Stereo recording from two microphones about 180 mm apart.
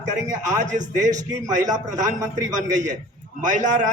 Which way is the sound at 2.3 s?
45° right (ahead or behind).